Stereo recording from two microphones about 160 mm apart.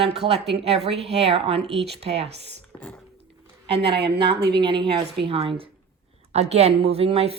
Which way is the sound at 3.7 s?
90° right.